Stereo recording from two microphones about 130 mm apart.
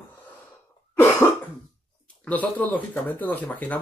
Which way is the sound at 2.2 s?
10° left (ahead or behind).